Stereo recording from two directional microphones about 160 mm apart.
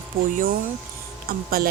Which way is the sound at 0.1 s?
65° right (ahead or behind).